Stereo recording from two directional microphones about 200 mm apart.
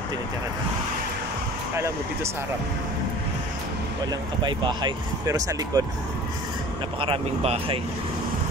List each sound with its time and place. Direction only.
4.4 s speech: 20° right (ahead or behind)
7.0 s speech: 30° right (ahead or behind)